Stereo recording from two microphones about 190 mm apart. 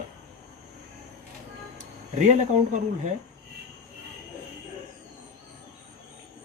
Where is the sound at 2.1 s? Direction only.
40° right (ahead or behind).